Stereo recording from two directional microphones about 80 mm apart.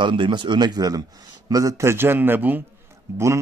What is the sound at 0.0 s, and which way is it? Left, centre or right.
Speech, right.